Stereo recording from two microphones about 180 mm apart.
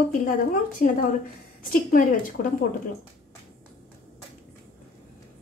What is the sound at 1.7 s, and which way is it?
Speech, 50° left (ahead or behind).